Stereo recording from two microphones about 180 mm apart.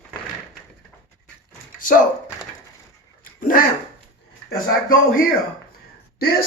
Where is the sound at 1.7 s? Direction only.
50° left (ahead or behind).